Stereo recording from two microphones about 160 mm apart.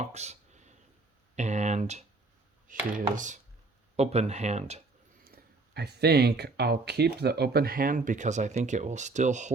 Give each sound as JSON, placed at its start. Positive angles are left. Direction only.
{"t": 0.0, "sound": "a sound", "side_deg": -45}
{"t": 1.4, "sound": "speech", "side_deg": -45}
{"t": 2.7, "sound": "speech", "side_deg": -55}
{"t": 5.2, "sound": "speech", "side_deg": -80}